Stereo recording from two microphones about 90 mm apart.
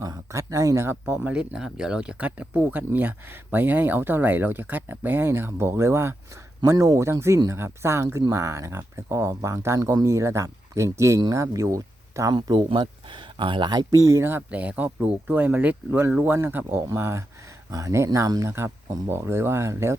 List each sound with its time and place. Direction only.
0.0 s speech: 40° right (ahead or behind)
12.5 s speech: 65° right (ahead or behind); by 20.0 s 30° right (ahead or behind)